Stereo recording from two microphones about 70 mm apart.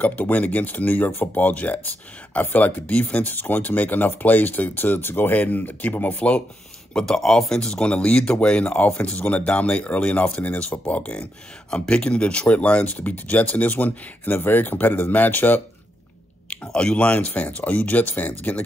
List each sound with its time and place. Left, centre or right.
0.0 s speech: left
6.9 s speech: centre; by 15.6 s left
16.6 s speech: centre